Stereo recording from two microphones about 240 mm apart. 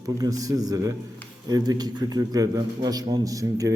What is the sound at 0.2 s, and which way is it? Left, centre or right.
A man's voice, centre.